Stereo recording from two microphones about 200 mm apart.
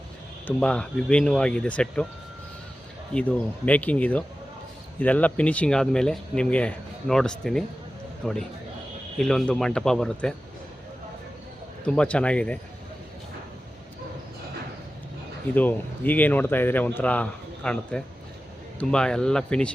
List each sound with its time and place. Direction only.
0.4 s speech: 5° left (ahead or behind)
3.2 s speech: 5° left (ahead or behind)
11.9 s speech: 5° left (ahead or behind)
15.5 s speech: 10° left (ahead or behind)